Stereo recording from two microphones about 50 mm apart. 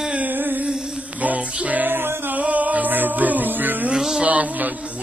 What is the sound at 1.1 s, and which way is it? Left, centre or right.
Music, right.